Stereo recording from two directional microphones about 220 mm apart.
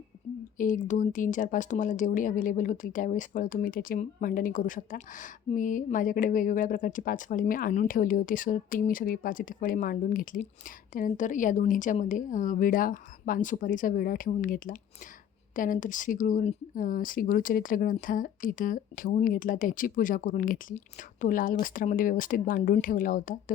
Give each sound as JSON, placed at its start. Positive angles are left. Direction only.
{"t": 0.6, "sound": "speech", "side_deg": 35}